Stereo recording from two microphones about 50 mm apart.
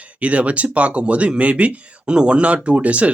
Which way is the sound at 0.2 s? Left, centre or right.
Right.